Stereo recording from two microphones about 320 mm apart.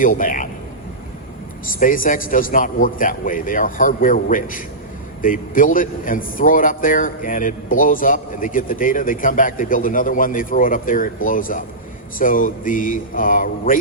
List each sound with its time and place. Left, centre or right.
0.0 s a man's voice: left
1.8 s a man's voice: left